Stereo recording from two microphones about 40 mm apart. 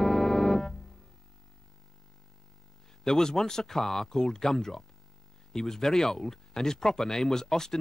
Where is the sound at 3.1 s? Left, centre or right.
Centre.